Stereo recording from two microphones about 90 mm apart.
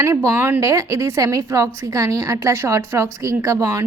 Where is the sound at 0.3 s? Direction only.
20° right (ahead or behind).